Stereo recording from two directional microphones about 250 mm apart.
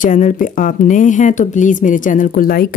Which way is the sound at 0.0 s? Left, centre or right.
Left.